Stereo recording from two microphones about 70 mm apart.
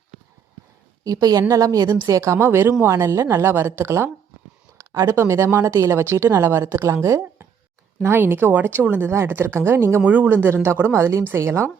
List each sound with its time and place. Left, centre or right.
1.0 s a woman's voice: right
4.8 s a woman's voice: right
10.0 s a woman's voice: right